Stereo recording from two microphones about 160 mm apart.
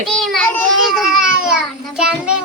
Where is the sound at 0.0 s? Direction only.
Centre (ahead or behind).